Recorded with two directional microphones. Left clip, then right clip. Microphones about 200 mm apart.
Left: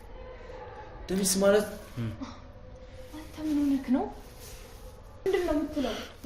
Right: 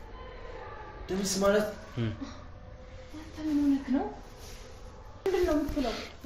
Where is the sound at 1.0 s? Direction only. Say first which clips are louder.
Left 2 dB; 60° left (ahead or behind).